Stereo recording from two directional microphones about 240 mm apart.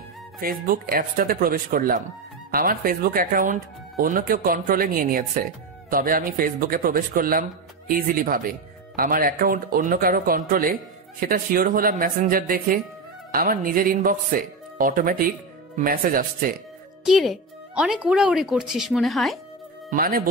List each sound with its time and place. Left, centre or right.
0.4 s speech: right
17.0 s speech: centre
19.9 s speech: right